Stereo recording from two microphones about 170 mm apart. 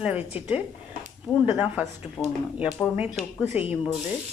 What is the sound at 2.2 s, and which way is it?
Speech, 15° left (ahead or behind).